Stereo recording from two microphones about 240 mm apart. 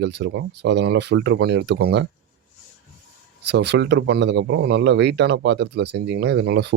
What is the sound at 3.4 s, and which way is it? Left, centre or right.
Speech, right.